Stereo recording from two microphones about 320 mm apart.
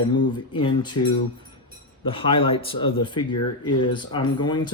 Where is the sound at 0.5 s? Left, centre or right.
Centre.